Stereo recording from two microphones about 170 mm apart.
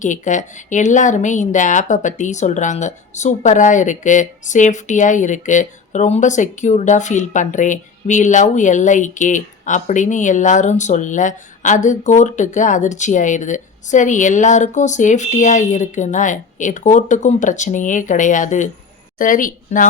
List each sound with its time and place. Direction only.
0.0 s speech: 45° left (ahead or behind)